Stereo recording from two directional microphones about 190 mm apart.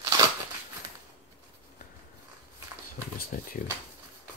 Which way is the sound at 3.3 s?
45° left (ahead or behind).